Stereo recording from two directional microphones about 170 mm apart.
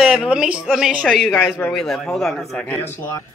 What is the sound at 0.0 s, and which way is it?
A man's voice, 5° right (ahead or behind).